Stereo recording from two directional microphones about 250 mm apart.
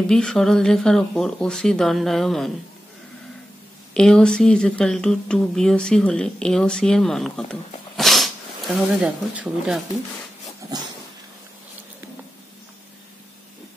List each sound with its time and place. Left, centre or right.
0.0 s speech: centre
3.9 s speech: centre